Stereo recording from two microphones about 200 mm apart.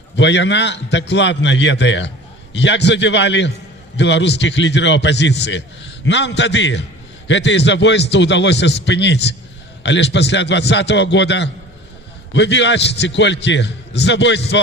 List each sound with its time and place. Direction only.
0.2 s a man's voice: 60° left (ahead or behind)